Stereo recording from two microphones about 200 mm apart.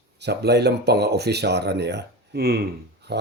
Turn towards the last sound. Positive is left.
turn(degrees=-55)  # may be behind; listen again after turning